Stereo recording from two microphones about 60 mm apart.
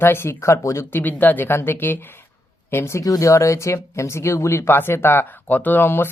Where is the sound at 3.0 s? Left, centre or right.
Left.